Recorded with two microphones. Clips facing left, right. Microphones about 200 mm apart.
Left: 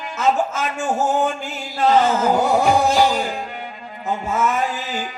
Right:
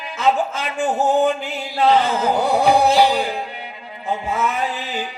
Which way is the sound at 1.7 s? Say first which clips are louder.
Even; 45° left (ahead or behind).